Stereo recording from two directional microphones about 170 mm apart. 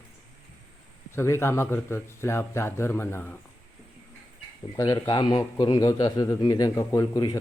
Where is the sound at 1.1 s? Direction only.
15° left (ahead or behind).